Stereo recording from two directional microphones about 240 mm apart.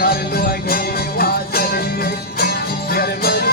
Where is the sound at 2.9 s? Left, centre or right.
Left.